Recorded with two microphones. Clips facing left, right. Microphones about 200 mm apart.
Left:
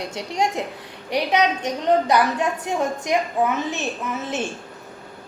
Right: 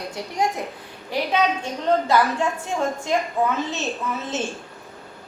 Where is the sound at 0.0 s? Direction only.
20° left (ahead or behind).